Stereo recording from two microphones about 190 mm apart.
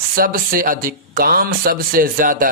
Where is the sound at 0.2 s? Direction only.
50° right (ahead or behind).